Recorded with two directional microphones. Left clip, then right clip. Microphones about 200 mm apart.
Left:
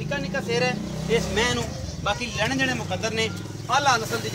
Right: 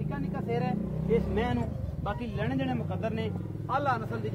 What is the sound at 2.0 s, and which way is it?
Speech, 45° right (ahead or behind).